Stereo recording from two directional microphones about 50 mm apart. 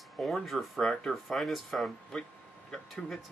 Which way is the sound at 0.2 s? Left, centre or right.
Centre.